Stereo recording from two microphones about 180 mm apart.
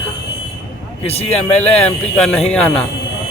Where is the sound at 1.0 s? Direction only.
35° left (ahead or behind).